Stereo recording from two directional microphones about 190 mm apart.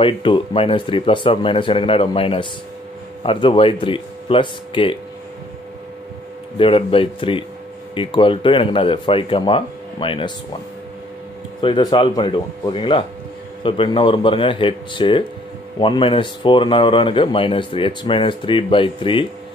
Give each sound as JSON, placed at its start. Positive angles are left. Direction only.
{"t": 0.0, "sound": "speech", "side_deg": 25}
{"t": 6.6, "sound": "speech", "side_deg": 30}
{"t": 11.6, "sound": "speech", "side_deg": 25}